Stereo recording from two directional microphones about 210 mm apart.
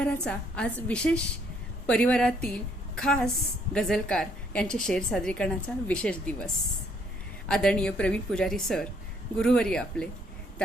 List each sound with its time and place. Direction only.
0.0 s a woman's voice: 5° left (ahead or behind)